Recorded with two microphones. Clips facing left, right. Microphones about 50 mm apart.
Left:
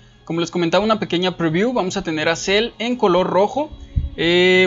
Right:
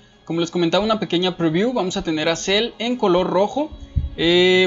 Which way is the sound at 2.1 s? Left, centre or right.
Left.